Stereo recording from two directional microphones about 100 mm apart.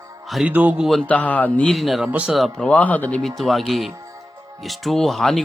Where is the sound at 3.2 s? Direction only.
Centre (ahead or behind).